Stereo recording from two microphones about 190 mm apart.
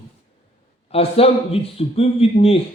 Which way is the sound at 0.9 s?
30° left (ahead or behind).